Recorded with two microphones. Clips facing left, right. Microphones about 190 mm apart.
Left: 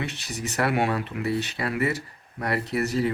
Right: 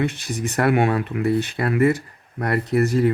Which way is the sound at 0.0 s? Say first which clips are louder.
Right 8 dB; 50° right (ahead or behind).